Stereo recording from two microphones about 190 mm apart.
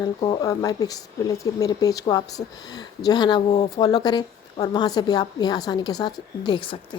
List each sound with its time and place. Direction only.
0.0 s speech: 20° left (ahead or behind)